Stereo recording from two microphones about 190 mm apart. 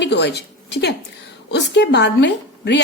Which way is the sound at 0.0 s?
60° left (ahead or behind).